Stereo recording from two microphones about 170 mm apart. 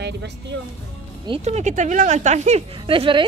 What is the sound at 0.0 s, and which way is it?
Speech, 85° right.